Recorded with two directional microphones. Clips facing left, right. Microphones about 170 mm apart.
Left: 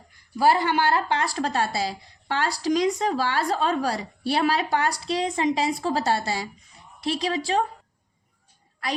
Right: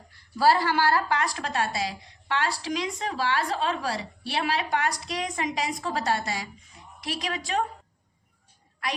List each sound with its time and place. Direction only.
0.3 s a woman's voice: 20° left (ahead or behind)